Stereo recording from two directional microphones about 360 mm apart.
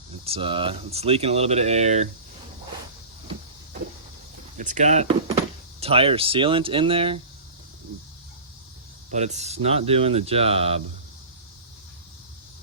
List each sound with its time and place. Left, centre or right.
0.1 s speech: centre
4.5 s speech: right
9.0 s speech: centre